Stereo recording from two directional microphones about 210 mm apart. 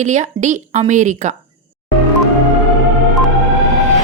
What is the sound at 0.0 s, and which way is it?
A woman's voice, 35° right (ahead or behind).